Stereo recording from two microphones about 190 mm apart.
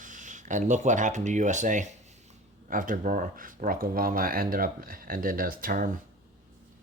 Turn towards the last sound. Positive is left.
turn(degrees=-45)  # may be behind; listen again after turning